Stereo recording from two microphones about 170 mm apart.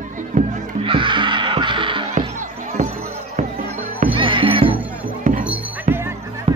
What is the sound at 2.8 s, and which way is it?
Music, 45° right (ahead or behind).